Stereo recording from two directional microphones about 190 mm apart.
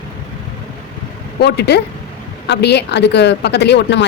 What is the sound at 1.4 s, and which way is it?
A woman's voice, 60° left (ahead or behind).